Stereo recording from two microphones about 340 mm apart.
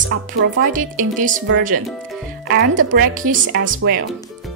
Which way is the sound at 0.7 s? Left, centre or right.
Right.